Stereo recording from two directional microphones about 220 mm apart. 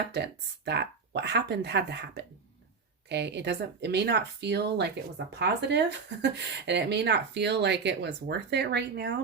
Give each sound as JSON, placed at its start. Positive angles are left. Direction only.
{"t": 0.1, "sound": "speech", "side_deg": -50}